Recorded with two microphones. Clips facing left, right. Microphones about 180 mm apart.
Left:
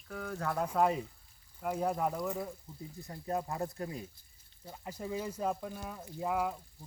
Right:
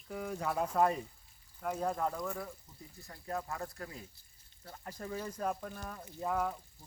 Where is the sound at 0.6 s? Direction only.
5° left (ahead or behind).